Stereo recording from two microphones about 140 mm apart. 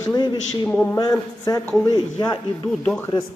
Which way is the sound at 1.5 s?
30° left (ahead or behind).